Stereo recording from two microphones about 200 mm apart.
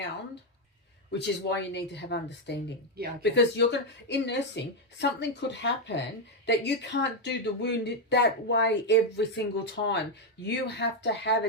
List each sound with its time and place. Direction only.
1.1 s speech: 60° left (ahead or behind)
2.9 s speech: 50° right (ahead or behind)
3.3 s speech: 60° left (ahead or behind)